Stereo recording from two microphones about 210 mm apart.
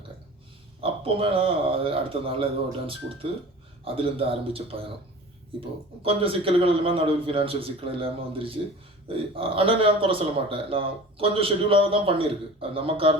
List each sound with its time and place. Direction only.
0.8 s a man's voice: 25° right (ahead or behind)